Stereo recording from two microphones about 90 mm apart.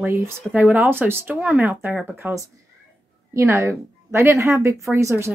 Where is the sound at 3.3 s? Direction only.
30° right (ahead or behind).